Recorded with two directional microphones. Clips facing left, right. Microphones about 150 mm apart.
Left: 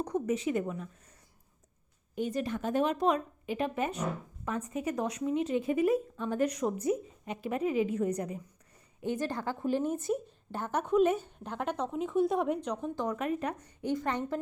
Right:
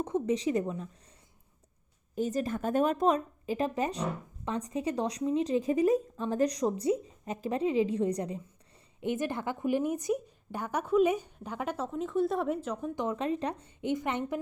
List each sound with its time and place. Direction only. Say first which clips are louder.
0.0 s speech: right 2 dB; 25° right (ahead or behind)
2.1 s a woman's voice: right 2 dB; 40° right (ahead or behind); by 12.9 s 5° right (ahead or behind)
13.0 s a woman's voice: right 2 dB; 25° right (ahead or behind)